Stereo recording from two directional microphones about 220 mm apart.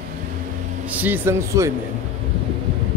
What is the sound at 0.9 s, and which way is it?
Speech, 10° right (ahead or behind).